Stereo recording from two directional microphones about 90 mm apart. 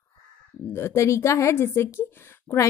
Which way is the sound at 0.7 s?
30° left (ahead or behind).